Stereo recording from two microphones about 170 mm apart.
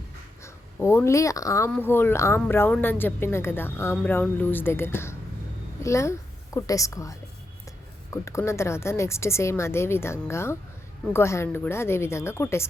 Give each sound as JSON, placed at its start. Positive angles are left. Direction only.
{"t": 0.4, "sound": "a woman's voice", "side_deg": 15}